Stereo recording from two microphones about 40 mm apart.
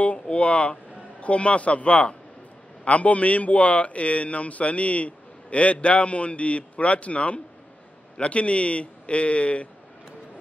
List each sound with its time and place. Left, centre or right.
0.0 s a man's voice: left